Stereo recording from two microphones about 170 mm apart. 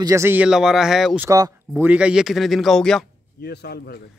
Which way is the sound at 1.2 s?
20° right (ahead or behind).